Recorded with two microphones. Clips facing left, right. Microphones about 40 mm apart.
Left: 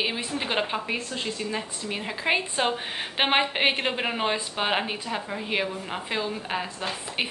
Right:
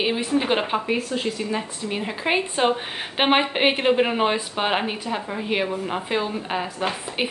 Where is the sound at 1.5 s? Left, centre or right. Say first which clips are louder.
Right 4 dB; centre.